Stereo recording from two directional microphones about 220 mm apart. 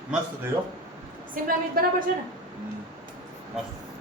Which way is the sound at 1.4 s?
40° right (ahead or behind).